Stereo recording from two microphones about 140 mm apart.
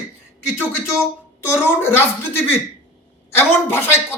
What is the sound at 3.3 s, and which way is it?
Speech, 15° left (ahead or behind).